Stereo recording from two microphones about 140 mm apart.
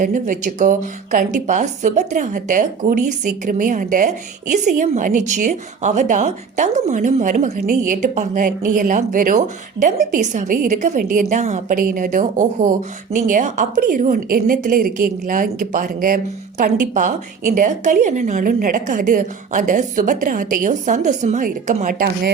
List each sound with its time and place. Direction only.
0.0 s a woman's voice: 70° right (ahead or behind)
10.2 s a woman's voice: 60° right (ahead or behind); by 22.3 s 85° right